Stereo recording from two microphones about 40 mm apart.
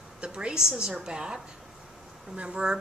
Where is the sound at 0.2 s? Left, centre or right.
Right.